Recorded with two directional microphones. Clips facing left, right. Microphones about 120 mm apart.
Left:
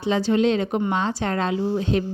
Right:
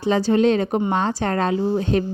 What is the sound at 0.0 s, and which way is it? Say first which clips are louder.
A woman's voice: right 3 dB; 40° right (ahead or behind).